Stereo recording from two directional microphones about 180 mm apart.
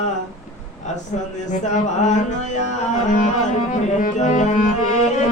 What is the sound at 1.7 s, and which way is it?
Music, 40° left (ahead or behind).